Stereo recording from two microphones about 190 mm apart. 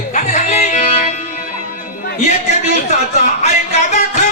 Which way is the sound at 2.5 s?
40° left (ahead or behind).